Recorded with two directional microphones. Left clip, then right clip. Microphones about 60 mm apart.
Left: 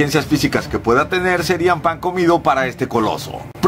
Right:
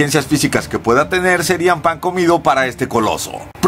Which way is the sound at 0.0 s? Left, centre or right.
Right.